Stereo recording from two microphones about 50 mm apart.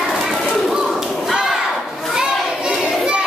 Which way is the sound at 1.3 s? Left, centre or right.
Centre.